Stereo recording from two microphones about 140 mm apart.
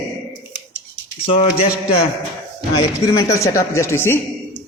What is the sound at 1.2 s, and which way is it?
Speech, 45° left (ahead or behind).